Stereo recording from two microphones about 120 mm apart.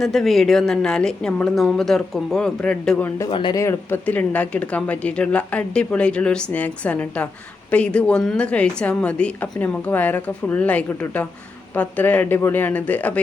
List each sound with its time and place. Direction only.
0.0 s a woman's voice: centre (ahead or behind)
3.2 s speech: 40° left (ahead or behind)
3.5 s speech: 25° left (ahead or behind)